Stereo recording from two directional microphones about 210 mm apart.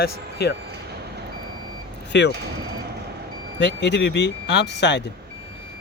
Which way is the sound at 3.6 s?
55° left (ahead or behind).